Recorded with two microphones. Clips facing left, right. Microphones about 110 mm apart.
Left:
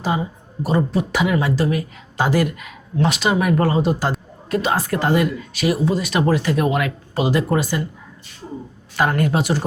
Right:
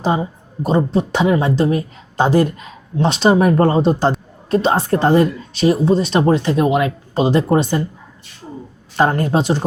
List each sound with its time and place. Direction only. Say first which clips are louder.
0.0 s a woman's voice: right 4 dB; 30° right (ahead or behind)
9.0 s a woman's voice: right 3 dB; 30° right (ahead or behind)